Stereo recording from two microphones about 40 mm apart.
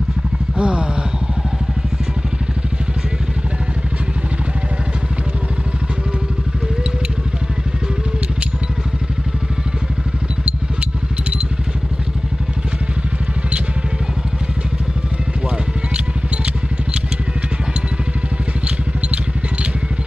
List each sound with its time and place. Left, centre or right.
0.6 s speech: right
10.4 s vehicle: right